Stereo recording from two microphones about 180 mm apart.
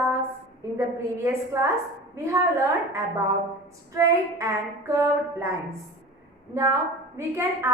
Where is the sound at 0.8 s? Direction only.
15° right (ahead or behind).